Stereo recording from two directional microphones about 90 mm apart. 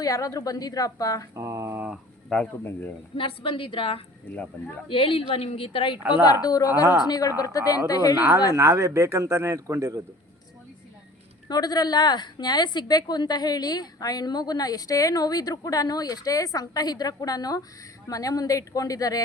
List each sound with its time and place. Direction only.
0.0 s a woman's voice: 40° left (ahead or behind)
1.4 s a sound: 35° right (ahead or behind)
2.3 s speech: 10° left (ahead or behind)
3.2 s a woman's voice: 75° left (ahead or behind)
4.3 s speech: 20° left (ahead or behind)
4.9 s a woman's voice: 75° left (ahead or behind)
6.0 s a woman's voice: 20° right (ahead or behind)
6.4 s a woman's voice: 45° left (ahead or behind)
8.5 s a man's voice: 35° right (ahead or behind)
11.4 s a woman's voice: 50° left (ahead or behind)